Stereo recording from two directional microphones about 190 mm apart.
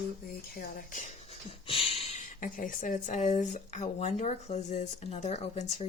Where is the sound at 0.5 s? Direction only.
50° left (ahead or behind).